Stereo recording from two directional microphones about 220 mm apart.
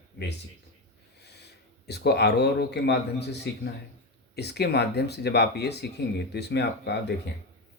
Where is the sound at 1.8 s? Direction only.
50° left (ahead or behind).